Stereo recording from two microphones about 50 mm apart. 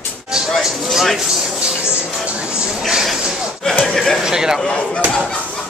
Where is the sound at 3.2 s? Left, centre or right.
Centre.